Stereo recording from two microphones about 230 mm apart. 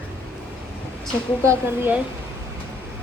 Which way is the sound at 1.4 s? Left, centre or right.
Centre.